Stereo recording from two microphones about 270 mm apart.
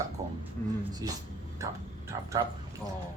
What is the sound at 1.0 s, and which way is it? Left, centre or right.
Speech, centre.